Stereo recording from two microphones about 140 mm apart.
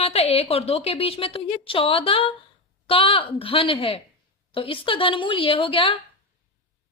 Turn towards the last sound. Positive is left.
turn(degrees=40)  # may be behind; listen again after turning